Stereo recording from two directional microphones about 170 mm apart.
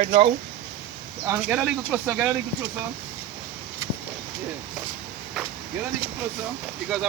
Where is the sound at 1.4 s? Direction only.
5° right (ahead or behind).